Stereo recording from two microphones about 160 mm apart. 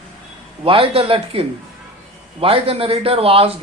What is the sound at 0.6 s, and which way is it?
Speech, 35° right (ahead or behind).